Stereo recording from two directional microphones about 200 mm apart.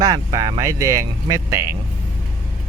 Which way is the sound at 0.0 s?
20° right (ahead or behind).